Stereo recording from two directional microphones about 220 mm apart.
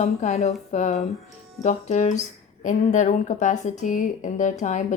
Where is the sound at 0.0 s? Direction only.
30° left (ahead or behind).